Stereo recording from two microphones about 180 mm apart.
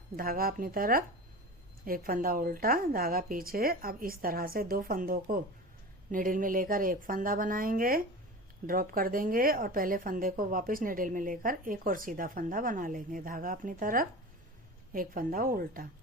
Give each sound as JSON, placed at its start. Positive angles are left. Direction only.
{"t": 0.2, "sound": "speech", "side_deg": -55}